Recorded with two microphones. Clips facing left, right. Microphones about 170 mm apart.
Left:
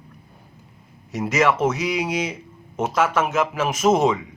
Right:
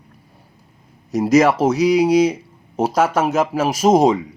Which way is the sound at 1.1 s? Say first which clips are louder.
Right 6 dB; 40° right (ahead or behind).